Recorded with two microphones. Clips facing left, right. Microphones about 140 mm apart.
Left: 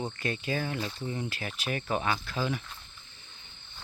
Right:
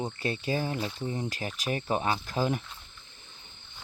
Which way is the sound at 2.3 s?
45° right (ahead or behind).